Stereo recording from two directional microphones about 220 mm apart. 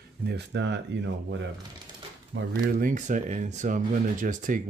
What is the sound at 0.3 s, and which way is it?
Speech, 55° right (ahead or behind).